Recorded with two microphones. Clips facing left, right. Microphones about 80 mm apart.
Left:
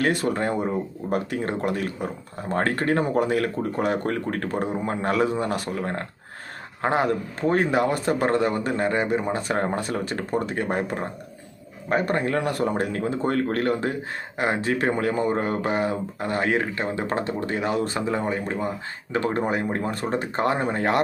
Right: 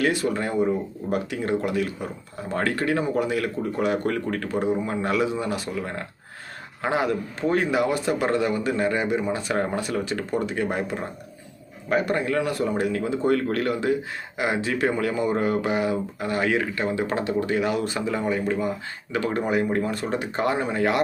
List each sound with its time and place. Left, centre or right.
0.0 s speech: left